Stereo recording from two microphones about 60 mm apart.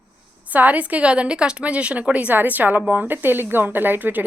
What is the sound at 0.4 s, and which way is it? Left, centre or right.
A woman's voice, right.